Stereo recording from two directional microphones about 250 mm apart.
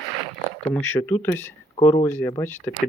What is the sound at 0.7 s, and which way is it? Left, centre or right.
Speech, centre.